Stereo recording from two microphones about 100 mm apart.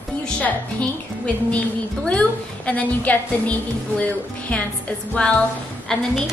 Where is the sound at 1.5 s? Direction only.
10° left (ahead or behind).